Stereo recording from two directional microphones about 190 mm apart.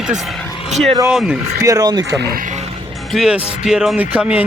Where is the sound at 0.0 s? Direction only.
Centre (ahead or behind).